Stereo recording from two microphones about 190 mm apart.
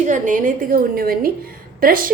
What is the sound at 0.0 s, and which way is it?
A woman's voice, 40° right (ahead or behind).